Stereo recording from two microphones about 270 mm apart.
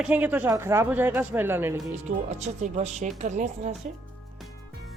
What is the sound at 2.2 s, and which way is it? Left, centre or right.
Speech, right.